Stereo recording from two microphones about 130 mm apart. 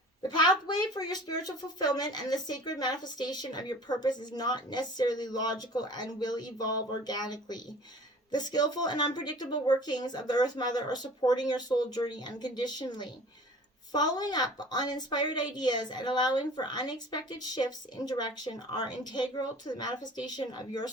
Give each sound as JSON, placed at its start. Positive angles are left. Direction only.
{"t": 0.2, "sound": "speech", "side_deg": 35}